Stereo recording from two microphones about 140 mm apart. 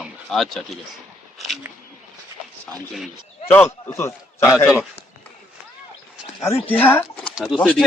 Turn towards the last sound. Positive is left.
turn(degrees=-5)  # may be behind; listen again after turning